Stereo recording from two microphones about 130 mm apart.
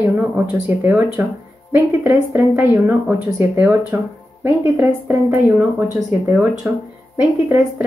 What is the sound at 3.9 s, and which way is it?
Speech, 20° right (ahead or behind).